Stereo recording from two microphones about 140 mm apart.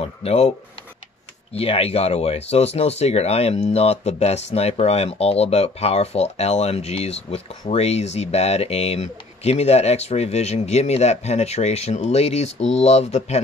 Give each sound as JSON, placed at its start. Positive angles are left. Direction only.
{"t": 0.0, "sound": "speech", "side_deg": 50}
{"t": 1.5, "sound": "speech", "side_deg": 45}